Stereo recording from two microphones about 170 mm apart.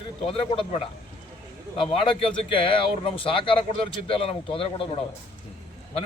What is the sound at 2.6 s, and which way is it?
Speech, 30° left (ahead or behind).